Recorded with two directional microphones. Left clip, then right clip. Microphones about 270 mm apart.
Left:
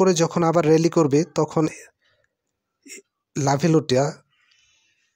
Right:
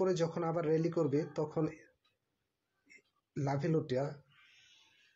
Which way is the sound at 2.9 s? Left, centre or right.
Left.